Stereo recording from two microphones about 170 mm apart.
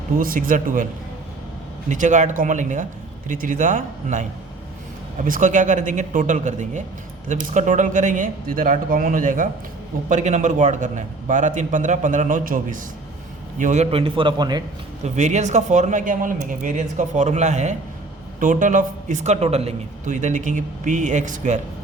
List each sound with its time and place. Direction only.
0.2 s speech: 55° right (ahead or behind)
1.9 s a man's voice: 45° right (ahead or behind); by 14.6 s 25° right (ahead or behind)
15.0 s speech: 45° right (ahead or behind)